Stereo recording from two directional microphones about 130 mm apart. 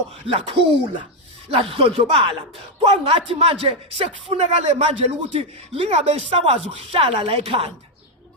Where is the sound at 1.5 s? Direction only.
45° right (ahead or behind).